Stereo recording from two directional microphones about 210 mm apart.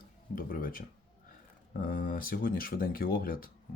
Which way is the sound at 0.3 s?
40° left (ahead or behind).